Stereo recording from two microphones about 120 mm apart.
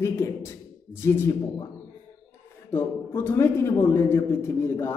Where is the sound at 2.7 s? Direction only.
15° left (ahead or behind).